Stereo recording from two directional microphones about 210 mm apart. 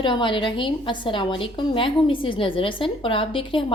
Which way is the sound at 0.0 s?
20° left (ahead or behind).